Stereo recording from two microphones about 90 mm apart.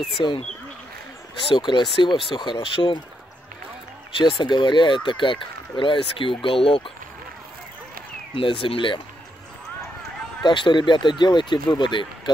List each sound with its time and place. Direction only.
1.5 s speech: 60° left (ahead or behind)
4.2 s speech: 65° left (ahead or behind)
8.4 s speech: 75° left (ahead or behind)
10.4 s speech: 60° left (ahead or behind)